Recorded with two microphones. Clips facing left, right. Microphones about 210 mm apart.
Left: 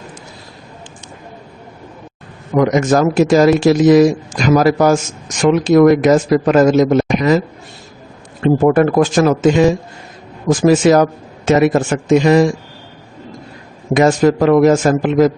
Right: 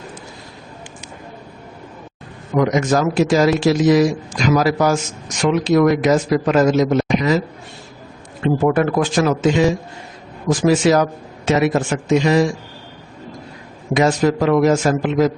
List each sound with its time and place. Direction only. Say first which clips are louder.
2.6 s a man's voice: left 4 dB; 50° left (ahead or behind)
8.6 s a man's voice: left 5 dB; 45° left (ahead or behind)
13.9 s a man's voice: left 4 dB; 50° left (ahead or behind)